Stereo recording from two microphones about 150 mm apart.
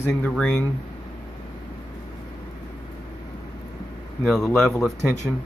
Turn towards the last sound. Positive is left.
turn(degrees=0)  # may be behind; listen again after turning